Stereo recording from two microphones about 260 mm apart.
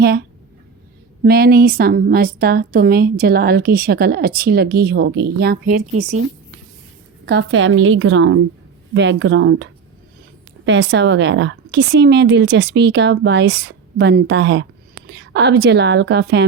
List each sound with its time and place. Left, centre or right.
0.0 s a woman's voice: right
7.3 s a woman's voice: right
10.7 s a woman's voice: right